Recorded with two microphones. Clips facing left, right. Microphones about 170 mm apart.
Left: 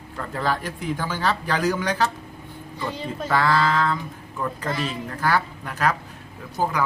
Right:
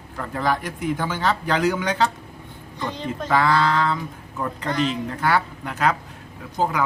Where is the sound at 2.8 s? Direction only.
5° left (ahead or behind).